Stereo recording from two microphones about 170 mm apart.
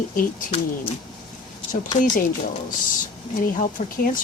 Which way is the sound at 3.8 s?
45° left (ahead or behind).